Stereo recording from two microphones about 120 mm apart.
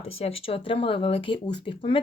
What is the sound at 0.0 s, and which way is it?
Speech, 55° left (ahead or behind).